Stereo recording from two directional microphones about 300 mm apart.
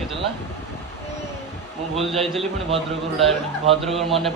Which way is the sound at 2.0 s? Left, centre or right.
Centre.